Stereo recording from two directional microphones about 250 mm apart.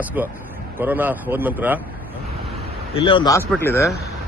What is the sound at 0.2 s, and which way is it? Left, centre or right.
A man's voice, centre.